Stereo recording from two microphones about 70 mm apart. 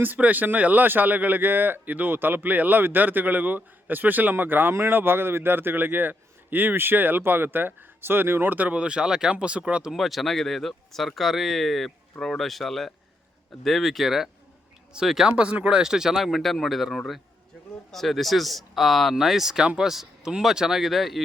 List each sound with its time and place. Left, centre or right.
0.0 s a man's voice: right
9.9 s speech: centre